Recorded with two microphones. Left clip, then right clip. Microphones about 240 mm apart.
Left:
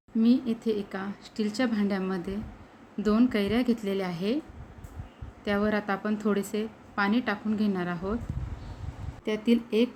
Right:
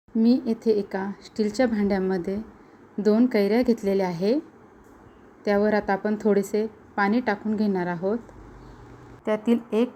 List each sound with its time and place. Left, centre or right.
0.2 s a woman's voice: centre
5.5 s a woman's voice: centre
9.5 s speech: right